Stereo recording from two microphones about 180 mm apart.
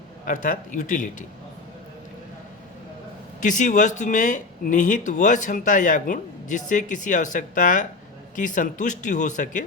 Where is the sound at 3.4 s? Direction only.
45° left (ahead or behind).